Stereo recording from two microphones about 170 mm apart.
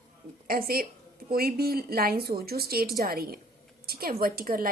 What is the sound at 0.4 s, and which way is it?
A woman's voice, 60° right (ahead or behind).